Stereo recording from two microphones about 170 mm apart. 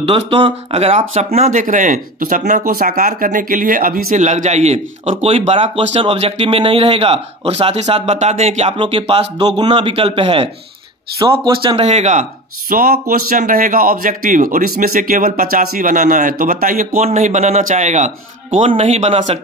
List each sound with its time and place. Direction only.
0.0 s a man's voice: 30° right (ahead or behind)
11.8 s a man's voice: 45° right (ahead or behind)